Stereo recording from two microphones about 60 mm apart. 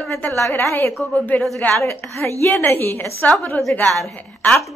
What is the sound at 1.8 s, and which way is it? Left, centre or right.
A woman's voice, left.